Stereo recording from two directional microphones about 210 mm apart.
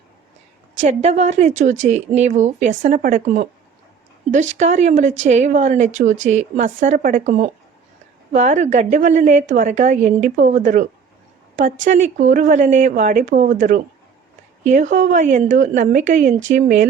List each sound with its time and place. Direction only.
0.9 s a woman's voice: 35° right (ahead or behind)
4.5 s a woman's voice: 35° right (ahead or behind)
11.9 s a woman's voice: 35° right (ahead or behind)